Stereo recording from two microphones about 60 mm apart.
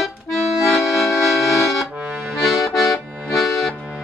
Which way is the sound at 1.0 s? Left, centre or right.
Left.